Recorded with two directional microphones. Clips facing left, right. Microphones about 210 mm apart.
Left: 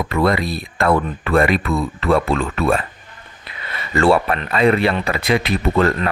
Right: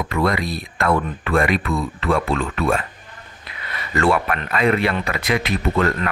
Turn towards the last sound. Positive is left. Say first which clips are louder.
# left 3 dB
turn(degrees=30)  # may be behind; listen again after turning